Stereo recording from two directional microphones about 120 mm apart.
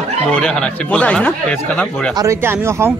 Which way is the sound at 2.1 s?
25° right (ahead or behind).